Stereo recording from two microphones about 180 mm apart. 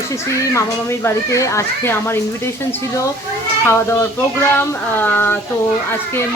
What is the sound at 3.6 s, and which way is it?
Speech, 15° left (ahead or behind).